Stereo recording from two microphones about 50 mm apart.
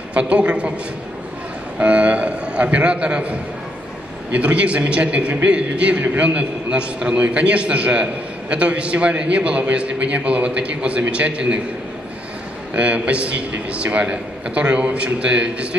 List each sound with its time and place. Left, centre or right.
0.1 s a man's voice: right
1.8 s a man's voice: right
12.7 s a man's voice: right